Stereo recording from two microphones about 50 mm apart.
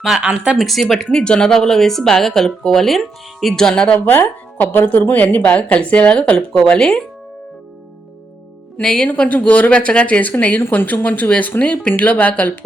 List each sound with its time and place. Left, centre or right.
0.0 s speech: centre
1.1 s speech: centre
4.0 s speech: left
8.8 s speech: centre; by 12.5 s left